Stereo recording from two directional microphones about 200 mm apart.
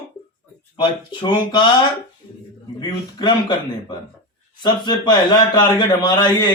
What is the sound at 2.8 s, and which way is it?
A man's voice, 20° left (ahead or behind).